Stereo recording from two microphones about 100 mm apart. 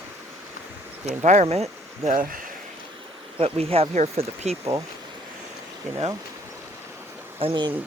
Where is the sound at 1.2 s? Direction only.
90° right.